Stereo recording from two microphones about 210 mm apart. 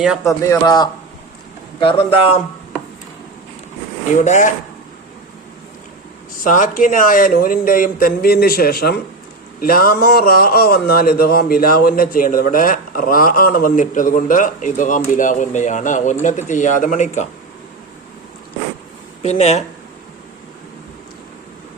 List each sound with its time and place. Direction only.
0.3 s a man's voice: 15° left (ahead or behind)
4.2 s speech: 35° left (ahead or behind)
6.4 s a man's voice: 40° left (ahead or behind)
19.2 s speech: 30° left (ahead or behind)